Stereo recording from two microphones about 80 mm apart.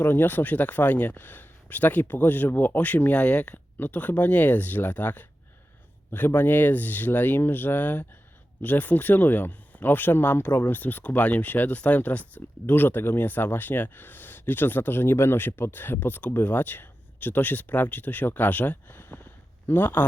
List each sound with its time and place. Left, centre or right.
0.0 s speech: left